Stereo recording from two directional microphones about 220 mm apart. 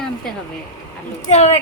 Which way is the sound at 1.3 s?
30° left (ahead or behind).